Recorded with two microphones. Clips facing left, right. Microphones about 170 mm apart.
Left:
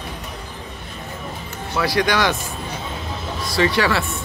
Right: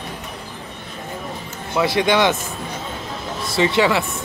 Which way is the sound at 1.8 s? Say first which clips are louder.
Right 2 dB; 20° right (ahead or behind).